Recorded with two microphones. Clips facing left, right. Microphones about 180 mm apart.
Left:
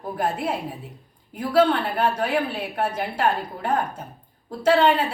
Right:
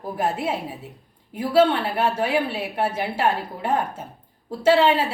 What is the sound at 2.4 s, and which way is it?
Speech, 5° right (ahead or behind).